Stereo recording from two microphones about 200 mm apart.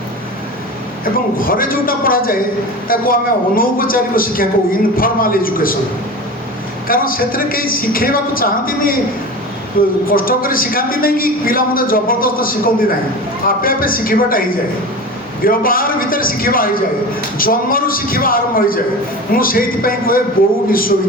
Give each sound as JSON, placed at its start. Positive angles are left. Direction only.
{"t": 1.4, "sound": "a man's voice", "side_deg": 45}
{"t": 6.8, "sound": "a man's voice", "side_deg": 45}
{"t": 15.4, "sound": "a man's voice", "side_deg": 45}